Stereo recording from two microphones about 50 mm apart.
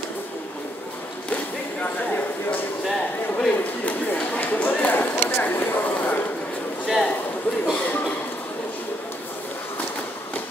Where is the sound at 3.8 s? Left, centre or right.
Left.